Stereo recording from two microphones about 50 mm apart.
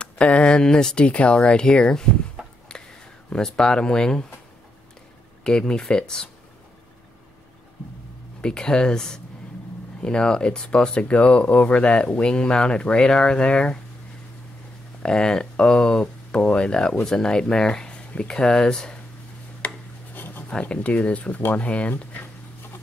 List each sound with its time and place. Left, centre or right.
0.0 s speech: left
2.4 s a sound: centre
2.7 s a sound: centre
3.3 s speech: centre
5.4 s speech: centre
8.4 s speech: centre
15.0 s speech: centre
19.6 s filing: left
20.2 s writing: left
20.6 s speech: left